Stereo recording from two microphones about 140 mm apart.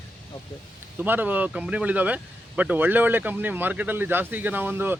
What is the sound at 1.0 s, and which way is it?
Speech, 15° right (ahead or behind).